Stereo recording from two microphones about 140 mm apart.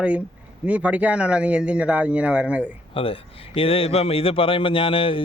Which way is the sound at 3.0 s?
40° left (ahead or behind).